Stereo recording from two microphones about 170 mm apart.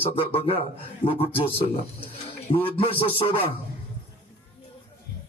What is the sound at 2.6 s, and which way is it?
Speech, 30° left (ahead or behind).